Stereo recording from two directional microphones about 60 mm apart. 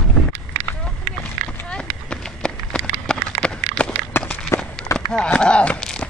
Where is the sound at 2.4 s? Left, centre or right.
Centre.